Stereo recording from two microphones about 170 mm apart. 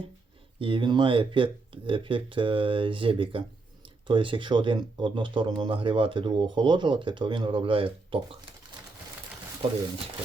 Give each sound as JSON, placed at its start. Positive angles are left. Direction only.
{"t": 0.6, "sound": "speech", "side_deg": -30}